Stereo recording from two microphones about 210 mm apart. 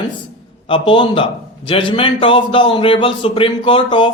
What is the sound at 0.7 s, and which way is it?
A man's voice, 25° left (ahead or behind).